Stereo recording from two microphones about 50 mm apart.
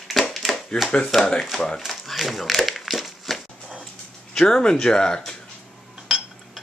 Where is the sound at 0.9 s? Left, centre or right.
Centre.